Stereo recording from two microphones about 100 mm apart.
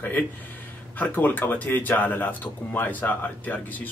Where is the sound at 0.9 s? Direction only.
15° left (ahead or behind).